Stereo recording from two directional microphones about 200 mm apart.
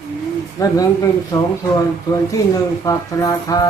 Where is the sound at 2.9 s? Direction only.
15° left (ahead or behind).